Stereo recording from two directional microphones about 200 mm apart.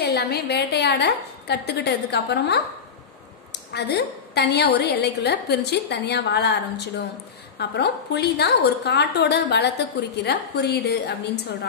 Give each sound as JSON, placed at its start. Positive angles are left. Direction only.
{"t": 0.0, "sound": "a woman's voice", "side_deg": 55}
{"t": 3.7, "sound": "a woman's voice", "side_deg": 55}